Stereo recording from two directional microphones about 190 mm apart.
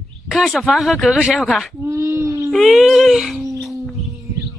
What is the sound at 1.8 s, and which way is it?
Speech, 15° right (ahead or behind).